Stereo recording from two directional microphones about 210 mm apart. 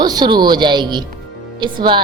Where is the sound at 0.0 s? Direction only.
20° right (ahead or behind).